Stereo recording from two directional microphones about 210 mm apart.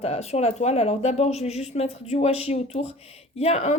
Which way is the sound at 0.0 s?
30° left (ahead or behind).